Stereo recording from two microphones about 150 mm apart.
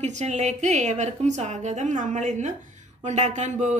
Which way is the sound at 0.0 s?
50° right (ahead or behind).